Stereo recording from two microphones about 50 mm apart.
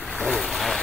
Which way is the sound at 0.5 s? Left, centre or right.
Centre.